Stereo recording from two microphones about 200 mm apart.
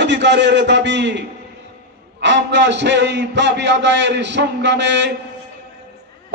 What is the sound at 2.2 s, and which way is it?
A man's voice, 60° right (ahead or behind).